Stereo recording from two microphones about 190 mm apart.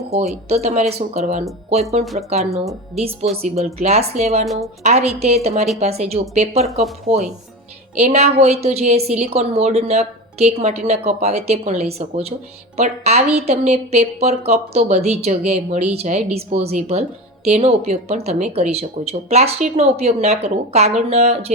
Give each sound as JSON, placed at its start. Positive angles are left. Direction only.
{"t": 0.4, "sound": "a woman's voice", "side_deg": -35}
{"t": 2.4, "sound": "speech", "side_deg": 0}
{"t": 2.9, "sound": "a woman's voice", "side_deg": -35}
{"t": 4.4, "sound": "speech", "side_deg": 0}
{"t": 4.8, "sound": "a woman's voice", "side_deg": -35}